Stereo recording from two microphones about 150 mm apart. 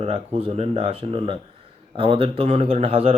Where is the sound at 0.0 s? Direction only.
40° right (ahead or behind).